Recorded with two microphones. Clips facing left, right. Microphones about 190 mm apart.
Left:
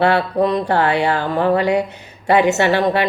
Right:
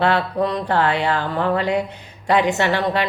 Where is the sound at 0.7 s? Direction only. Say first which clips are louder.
Even; 65° left (ahead or behind).